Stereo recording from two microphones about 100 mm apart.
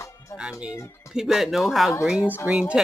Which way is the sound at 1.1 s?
5° right (ahead or behind).